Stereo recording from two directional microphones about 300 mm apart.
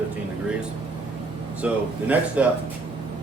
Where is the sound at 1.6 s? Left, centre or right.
Centre.